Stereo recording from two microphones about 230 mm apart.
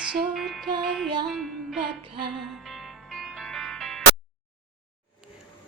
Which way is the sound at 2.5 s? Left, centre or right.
Centre.